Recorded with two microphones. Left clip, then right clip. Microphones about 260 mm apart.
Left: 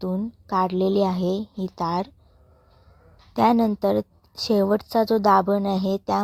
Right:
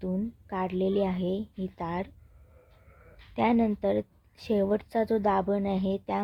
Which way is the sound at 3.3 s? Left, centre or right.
Left.